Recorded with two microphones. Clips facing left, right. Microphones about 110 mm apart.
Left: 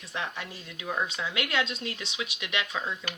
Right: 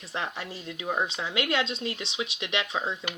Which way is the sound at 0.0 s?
30° right (ahead or behind).